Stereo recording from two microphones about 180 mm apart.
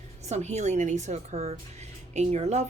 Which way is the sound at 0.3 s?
40° right (ahead or behind).